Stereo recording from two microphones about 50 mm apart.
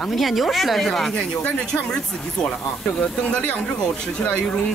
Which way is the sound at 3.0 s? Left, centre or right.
Left.